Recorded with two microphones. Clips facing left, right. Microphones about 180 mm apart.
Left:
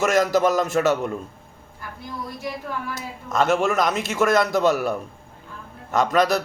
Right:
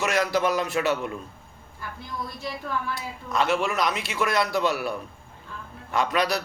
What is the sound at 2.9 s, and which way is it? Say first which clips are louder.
A man's voice: left 2 dB; 45° left (ahead or behind).